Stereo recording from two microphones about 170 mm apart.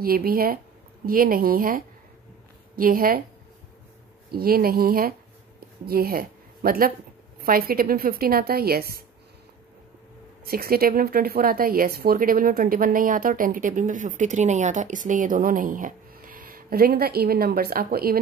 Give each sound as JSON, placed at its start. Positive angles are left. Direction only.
{"t": 0.0, "sound": "a woman's voice", "side_deg": -60}
{"t": 4.3, "sound": "speech", "side_deg": -60}
{"t": 10.4, "sound": "speech", "side_deg": -60}